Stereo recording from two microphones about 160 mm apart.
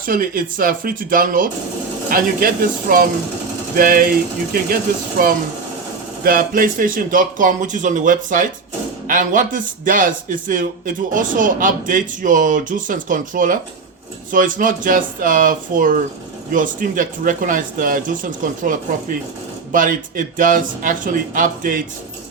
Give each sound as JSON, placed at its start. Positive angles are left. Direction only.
{"t": 0.0, "sound": "speech", "side_deg": -60}